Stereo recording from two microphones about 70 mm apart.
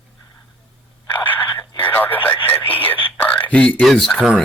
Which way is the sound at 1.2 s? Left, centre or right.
Left.